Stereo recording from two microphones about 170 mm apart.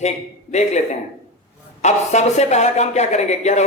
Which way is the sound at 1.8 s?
40° left (ahead or behind).